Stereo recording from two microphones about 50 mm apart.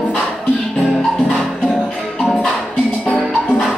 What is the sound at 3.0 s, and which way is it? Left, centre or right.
Music, left.